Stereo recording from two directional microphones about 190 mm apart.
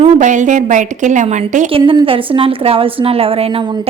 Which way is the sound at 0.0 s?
40° right (ahead or behind).